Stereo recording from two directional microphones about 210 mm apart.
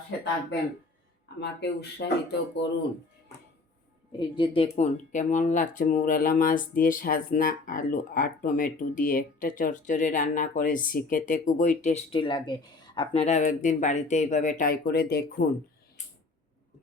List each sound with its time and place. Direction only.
1.4 s speech: 55° left (ahead or behind)
4.2 s speech: 25° left (ahead or behind); by 15.4 s 50° left (ahead or behind)